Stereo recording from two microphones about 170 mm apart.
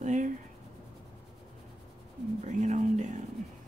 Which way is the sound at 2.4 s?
45° right (ahead or behind).